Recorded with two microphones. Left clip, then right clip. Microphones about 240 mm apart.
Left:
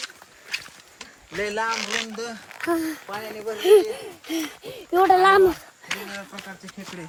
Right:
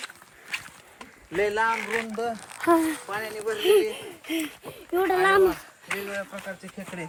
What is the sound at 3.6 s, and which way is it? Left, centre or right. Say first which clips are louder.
Speech: left 5 dB; centre.